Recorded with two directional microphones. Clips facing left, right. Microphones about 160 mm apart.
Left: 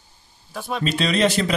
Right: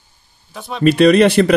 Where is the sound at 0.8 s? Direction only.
60° right (ahead or behind).